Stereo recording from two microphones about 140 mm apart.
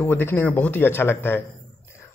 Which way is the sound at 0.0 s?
15° left (ahead or behind).